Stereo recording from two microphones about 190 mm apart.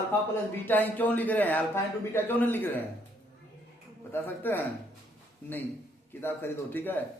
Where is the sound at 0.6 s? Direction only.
10° left (ahead or behind).